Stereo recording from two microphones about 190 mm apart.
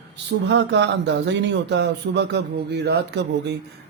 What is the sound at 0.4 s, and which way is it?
Speech, 65° right (ahead or behind).